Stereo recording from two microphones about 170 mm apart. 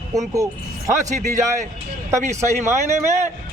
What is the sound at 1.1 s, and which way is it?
A man's voice, 45° right (ahead or behind).